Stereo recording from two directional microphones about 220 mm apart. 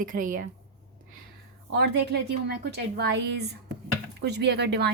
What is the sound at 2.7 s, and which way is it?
A woman's voice, 45° right (ahead or behind).